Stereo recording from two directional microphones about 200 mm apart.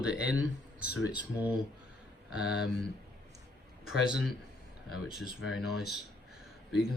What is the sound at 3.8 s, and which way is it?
Speech, centre (ahead or behind).